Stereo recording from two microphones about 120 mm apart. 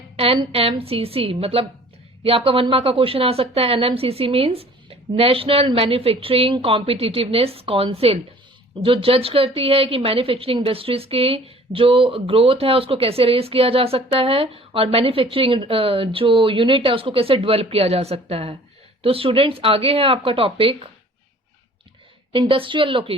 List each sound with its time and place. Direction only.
0.5 s a woman's voice: 55° right (ahead or behind)
22.3 s a woman's voice: 45° right (ahead or behind)